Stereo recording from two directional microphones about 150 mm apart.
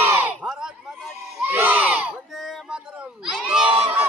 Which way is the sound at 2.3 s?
Centre (ahead or behind).